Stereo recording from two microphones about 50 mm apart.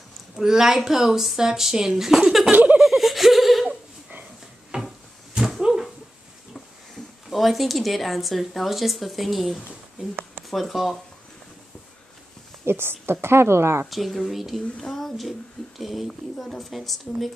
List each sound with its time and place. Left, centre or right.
0.4 s speech: centre
2.5 s giggle: right
2.8 s giggle: centre
4.7 s cupboard open or close: right
5.3 s a sound: centre
7.2 s speech: centre
10.0 s speech: right
10.5 s speech: centre
12.6 s a woman's voice: right
13.8 s speech: centre
14.8 s speech: centre